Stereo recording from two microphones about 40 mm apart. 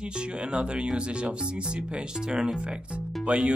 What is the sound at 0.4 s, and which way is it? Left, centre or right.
Speech, right.